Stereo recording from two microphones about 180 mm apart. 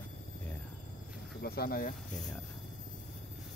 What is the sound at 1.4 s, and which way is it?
Speech, 60° left (ahead or behind).